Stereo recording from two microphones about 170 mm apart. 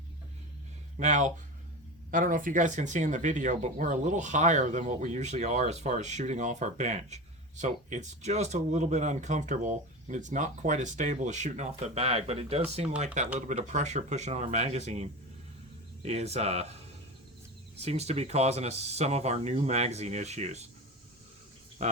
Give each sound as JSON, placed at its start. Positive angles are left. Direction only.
{"t": 0.9, "sound": "speech", "side_deg": -45}
{"t": 17.7, "sound": "speech", "side_deg": -40}
{"t": 21.8, "sound": "speech", "side_deg": -40}